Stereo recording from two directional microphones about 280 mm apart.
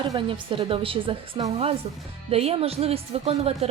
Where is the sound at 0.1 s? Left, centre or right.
Centre.